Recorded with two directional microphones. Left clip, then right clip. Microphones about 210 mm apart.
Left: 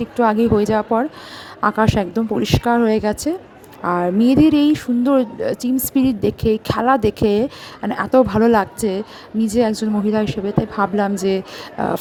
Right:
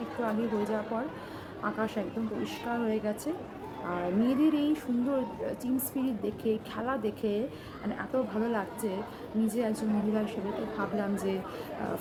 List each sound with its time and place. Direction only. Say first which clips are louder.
0.2 s speech: left 17 dB; 50° left (ahead or behind)